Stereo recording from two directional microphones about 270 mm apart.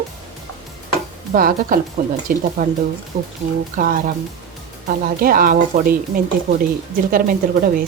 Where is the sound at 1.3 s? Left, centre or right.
Right.